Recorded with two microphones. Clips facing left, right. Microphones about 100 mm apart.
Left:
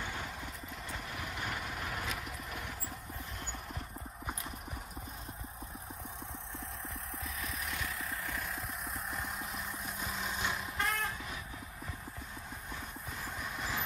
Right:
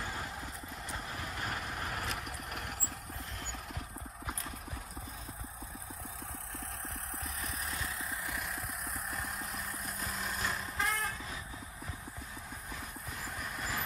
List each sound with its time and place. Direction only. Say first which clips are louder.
0.8 s vehicle: right 1 dB; 30° right (ahead or behind)
1.9 s vehicle: even; centre (ahead or behind)
7.4 s vehicle: even; 30° right (ahead or behind)
9.1 s vehicle: even; centre (ahead or behind)
13.4 s vehicle: even; centre (ahead or behind)